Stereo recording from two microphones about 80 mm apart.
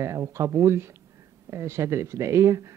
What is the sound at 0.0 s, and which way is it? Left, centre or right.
Speech, right.